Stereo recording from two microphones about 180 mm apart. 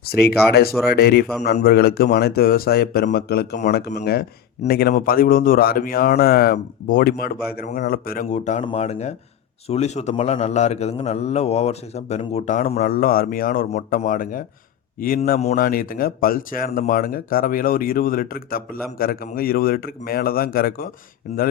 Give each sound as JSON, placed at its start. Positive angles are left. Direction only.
{"t": 0.0, "sound": "a man's voice", "side_deg": 60}
{"t": 15.5, "sound": "speech", "side_deg": 55}